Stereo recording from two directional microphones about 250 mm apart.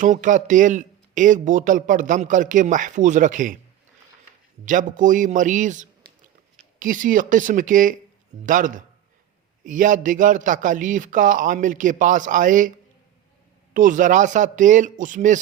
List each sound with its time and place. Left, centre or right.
0.0 s speech: right
4.6 s speech: right
13.7 s speech: right